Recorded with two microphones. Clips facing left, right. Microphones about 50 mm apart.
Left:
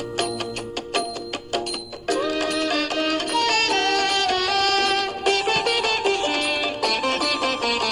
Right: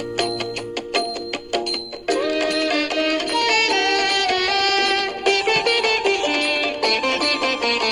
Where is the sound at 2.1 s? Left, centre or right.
Right.